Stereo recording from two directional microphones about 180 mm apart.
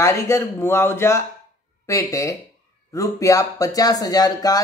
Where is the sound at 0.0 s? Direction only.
15° left (ahead or behind).